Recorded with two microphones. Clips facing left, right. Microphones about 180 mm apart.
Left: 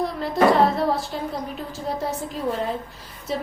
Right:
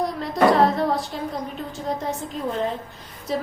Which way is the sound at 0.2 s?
Centre (ahead or behind).